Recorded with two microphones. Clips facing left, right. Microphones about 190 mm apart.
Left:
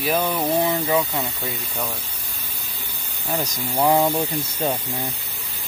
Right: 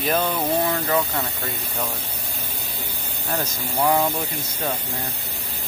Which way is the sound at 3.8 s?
25° left (ahead or behind).